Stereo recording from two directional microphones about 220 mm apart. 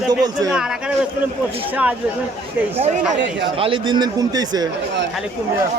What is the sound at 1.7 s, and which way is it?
Speech, 5° right (ahead or behind).